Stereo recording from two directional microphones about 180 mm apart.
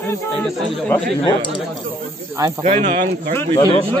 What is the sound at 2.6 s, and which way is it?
Speech, 45° right (ahead or behind).